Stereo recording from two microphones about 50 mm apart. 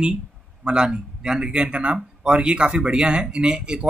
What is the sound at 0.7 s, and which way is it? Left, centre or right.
Speech, centre.